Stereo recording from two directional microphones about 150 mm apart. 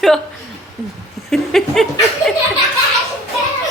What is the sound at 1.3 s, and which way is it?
Laughter, centre (ahead or behind).